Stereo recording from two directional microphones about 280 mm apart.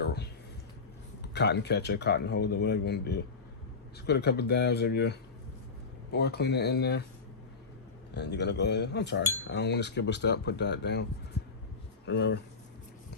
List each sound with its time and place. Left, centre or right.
0.0 s a sound: left
1.3 s cutlery: left
8.1 s cutlery: left
12.0 s cutlery: left